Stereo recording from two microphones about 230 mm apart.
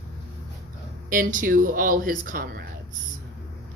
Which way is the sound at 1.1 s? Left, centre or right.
Right.